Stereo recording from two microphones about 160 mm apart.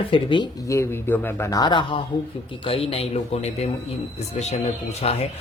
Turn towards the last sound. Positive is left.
turn(degrees=40)  # may be behind; listen again after turning